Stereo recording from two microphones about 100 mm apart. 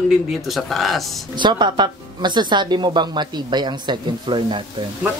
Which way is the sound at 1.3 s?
50° right (ahead or behind).